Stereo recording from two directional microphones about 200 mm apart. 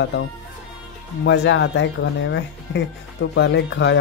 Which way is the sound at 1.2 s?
65° left (ahead or behind).